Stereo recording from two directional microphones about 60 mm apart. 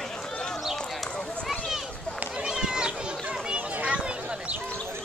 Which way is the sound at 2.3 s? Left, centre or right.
Centre.